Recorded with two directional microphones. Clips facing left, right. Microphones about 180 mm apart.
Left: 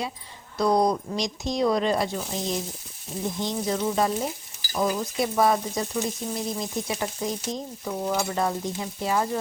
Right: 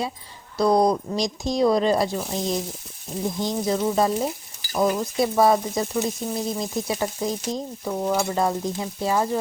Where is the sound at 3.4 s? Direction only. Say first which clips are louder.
Right 3 dB; 30° right (ahead or behind).